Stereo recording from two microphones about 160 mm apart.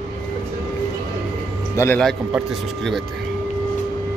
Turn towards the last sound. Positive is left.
turn(degrees=0)  # may be behind; listen again after turning